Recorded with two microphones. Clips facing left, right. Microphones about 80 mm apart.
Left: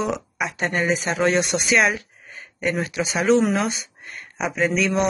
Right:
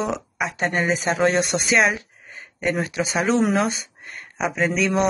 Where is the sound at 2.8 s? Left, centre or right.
Right.